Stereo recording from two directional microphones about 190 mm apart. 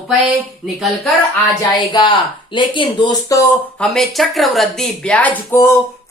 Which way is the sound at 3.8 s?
Centre (ahead or behind).